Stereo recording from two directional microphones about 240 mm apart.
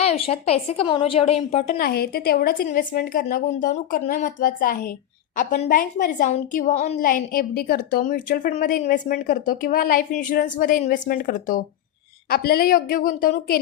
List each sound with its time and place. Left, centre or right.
0.0 s a woman's voice: left
1.8 s a woman's voice: left